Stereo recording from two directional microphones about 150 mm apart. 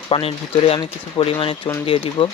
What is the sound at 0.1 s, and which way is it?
Speech, 40° left (ahead or behind).